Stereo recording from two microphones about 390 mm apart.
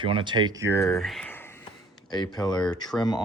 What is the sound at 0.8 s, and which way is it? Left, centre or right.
Speech, centre.